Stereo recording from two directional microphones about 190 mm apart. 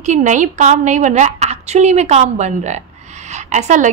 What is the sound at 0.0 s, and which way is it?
A woman's voice, 40° right (ahead or behind).